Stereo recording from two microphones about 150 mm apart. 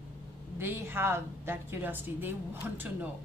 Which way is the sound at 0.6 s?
15° right (ahead or behind).